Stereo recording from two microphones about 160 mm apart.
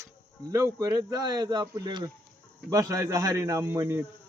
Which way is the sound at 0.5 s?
20° right (ahead or behind).